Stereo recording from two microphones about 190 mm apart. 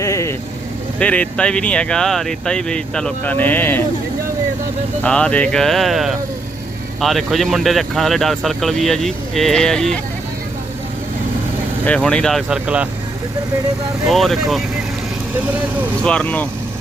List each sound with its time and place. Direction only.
0.0 s vehicle: 15° left (ahead or behind)
0.9 s speech: 5° left (ahead or behind)
5.0 s speech: 5° left (ahead or behind)
11.9 s speech: 5° left (ahead or behind)
14.1 s speech: centre (ahead or behind)
16.0 s speech: 5° left (ahead or behind)